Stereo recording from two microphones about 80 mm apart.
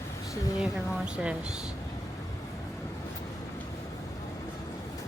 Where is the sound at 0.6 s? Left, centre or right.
Centre.